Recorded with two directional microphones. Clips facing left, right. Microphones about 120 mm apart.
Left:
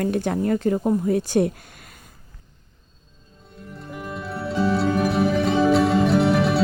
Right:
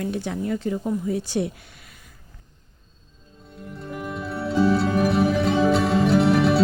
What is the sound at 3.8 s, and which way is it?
Music, centre (ahead or behind).